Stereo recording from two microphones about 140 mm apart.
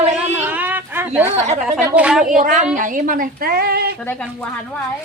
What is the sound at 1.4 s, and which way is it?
Speech, 55° right (ahead or behind).